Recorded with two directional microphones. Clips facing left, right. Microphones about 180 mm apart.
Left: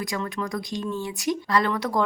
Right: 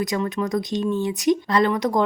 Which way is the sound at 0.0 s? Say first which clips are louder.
Right 6 dB; 20° right (ahead or behind).